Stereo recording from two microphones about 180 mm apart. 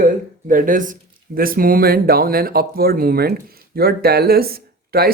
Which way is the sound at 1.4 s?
55° right (ahead or behind).